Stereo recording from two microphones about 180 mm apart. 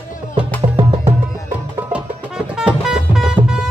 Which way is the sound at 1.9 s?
5° right (ahead or behind).